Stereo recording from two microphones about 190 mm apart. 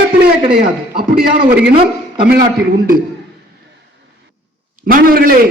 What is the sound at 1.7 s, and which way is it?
Speech, 30° right (ahead or behind).